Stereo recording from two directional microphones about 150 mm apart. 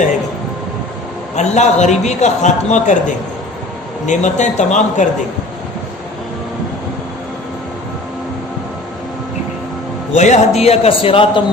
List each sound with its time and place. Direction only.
1.4 s a man's voice: 50° left (ahead or behind)
4.0 s a man's voice: 55° left (ahead or behind)
10.2 s a man's voice: 50° left (ahead or behind)